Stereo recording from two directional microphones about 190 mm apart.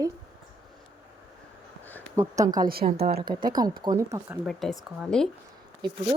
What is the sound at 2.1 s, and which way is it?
Speech, 15° right (ahead or behind).